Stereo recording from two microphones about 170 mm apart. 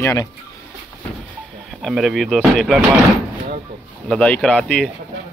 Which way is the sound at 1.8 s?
Centre (ahead or behind).